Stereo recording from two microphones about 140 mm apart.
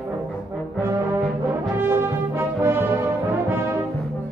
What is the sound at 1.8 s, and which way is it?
Brass instrument, 15° right (ahead or behind).